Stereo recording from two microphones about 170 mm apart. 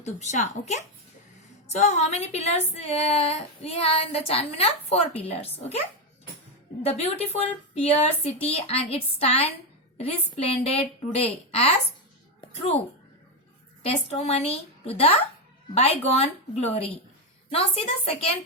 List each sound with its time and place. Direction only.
0.0 s a woman's voice: 45° left (ahead or behind)
1.6 s music: 40° left (ahead or behind)
6.8 s music: 35° left (ahead or behind)
14.1 s music: 40° left (ahead or behind)